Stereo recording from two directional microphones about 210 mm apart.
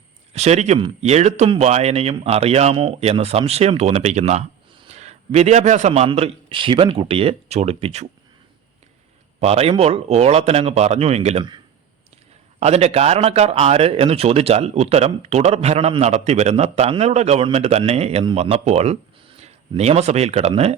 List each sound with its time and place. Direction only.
0.3 s a man's voice: 30° right (ahead or behind)
9.4 s a man's voice: 30° right (ahead or behind)